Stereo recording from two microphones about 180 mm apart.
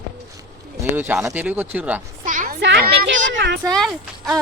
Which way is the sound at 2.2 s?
45° right (ahead or behind).